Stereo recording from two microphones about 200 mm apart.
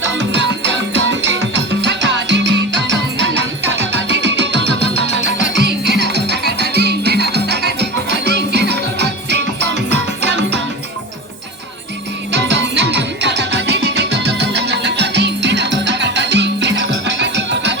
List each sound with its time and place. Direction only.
0.0 s music: 65° right (ahead or behind)
12.3 s music: 60° right (ahead or behind)